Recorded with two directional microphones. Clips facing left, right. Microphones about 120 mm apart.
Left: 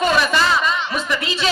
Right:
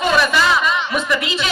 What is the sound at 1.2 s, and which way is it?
Speech, 30° left (ahead or behind).